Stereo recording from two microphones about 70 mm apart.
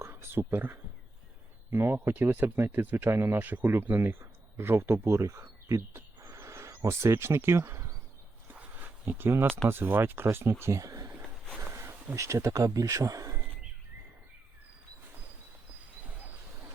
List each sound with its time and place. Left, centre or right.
0.0 s speech: right
6.1 s a sound: right
8.5 s a sound: right
9.6 s speech: right
11.7 s bee: right
12.1 s speech: right